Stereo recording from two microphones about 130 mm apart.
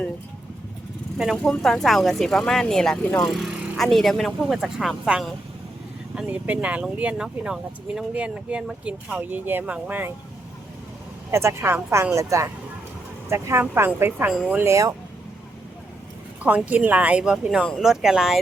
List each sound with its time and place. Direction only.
1.2 s speech: centre (ahead or behind)
11.3 s a woman's voice: 20° right (ahead or behind)
16.6 s speech: 10° right (ahead or behind)